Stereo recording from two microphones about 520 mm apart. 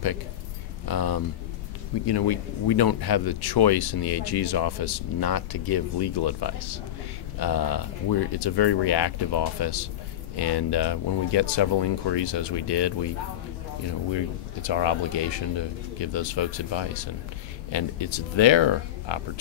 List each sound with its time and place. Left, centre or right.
0.8 s speech: left
14.1 s speech: left